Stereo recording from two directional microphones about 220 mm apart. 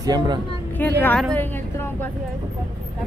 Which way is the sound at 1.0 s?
5° left (ahead or behind).